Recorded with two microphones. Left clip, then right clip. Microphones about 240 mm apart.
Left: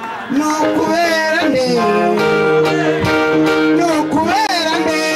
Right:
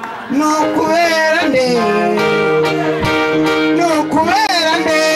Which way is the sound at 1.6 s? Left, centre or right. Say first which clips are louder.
Even; centre.